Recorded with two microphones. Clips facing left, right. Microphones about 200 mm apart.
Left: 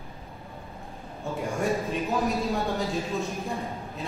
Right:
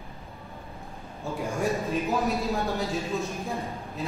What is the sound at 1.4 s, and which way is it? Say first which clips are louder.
Speech: even; centre (ahead or behind).